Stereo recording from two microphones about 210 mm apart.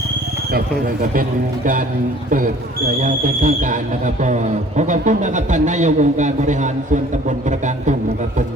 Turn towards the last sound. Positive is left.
turn(degrees=-35)  # may be behind; listen again after turning